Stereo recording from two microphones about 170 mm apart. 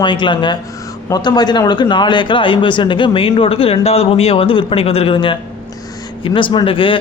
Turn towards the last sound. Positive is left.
turn(degrees=30)  # may be behind; listen again after turning